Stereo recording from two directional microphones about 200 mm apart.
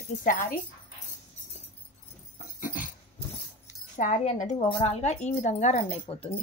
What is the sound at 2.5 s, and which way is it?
Dog, 40° left (ahead or behind).